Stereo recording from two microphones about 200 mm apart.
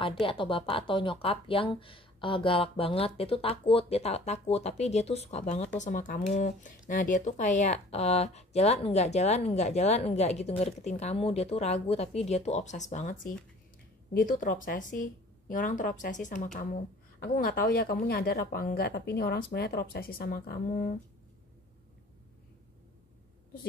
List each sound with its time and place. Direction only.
0.3 s speech: 25° left (ahead or behind); by 20.9 s 45° left (ahead or behind)